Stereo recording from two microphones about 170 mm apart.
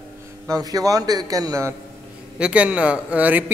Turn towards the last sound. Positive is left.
turn(degrees=-10)  # may be behind; listen again after turning